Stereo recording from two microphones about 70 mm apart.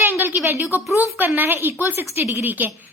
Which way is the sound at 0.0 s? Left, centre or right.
Right.